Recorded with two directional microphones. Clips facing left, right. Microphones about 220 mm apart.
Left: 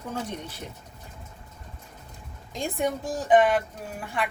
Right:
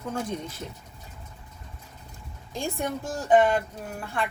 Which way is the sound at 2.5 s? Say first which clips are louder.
Left 2 dB; 20° left (ahead or behind).